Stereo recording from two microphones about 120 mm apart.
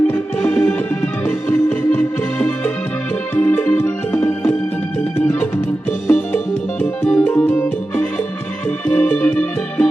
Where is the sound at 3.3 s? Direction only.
15° left (ahead or behind).